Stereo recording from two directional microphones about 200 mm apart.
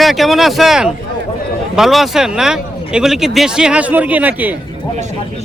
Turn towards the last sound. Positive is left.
turn(degrees=-10)  # may be behind; listen again after turning